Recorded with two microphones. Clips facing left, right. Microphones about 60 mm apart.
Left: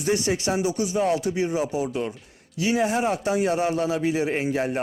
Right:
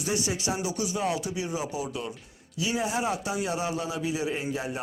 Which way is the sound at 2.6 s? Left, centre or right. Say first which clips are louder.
Left 6 dB; left.